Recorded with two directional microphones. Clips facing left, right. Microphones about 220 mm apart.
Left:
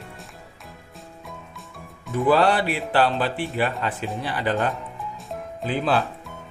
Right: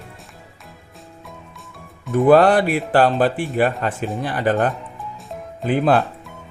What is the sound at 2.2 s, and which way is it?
Speech, 50° right (ahead or behind).